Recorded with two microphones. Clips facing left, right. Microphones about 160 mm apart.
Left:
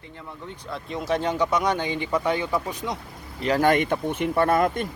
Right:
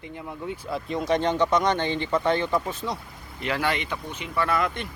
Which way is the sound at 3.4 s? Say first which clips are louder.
Left 7 dB; 40° left (ahead or behind).